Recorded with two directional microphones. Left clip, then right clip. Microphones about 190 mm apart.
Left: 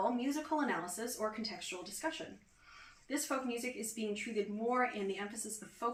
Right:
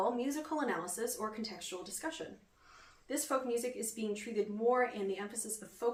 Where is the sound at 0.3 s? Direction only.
20° right (ahead or behind).